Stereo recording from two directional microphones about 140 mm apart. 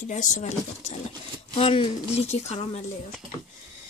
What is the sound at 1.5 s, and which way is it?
Speech, 40° left (ahead or behind).